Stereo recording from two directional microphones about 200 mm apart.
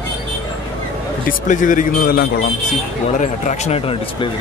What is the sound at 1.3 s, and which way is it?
Speech, 40° left (ahead or behind).